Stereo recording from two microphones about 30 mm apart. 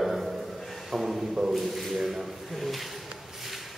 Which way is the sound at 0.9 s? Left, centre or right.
Centre.